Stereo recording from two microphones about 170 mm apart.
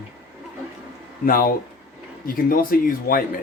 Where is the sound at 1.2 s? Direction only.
55° left (ahead or behind).